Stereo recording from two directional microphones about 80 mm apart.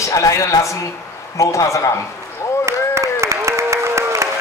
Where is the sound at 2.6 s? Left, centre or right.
Right.